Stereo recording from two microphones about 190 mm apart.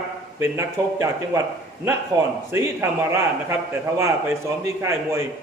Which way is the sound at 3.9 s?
15° right (ahead or behind).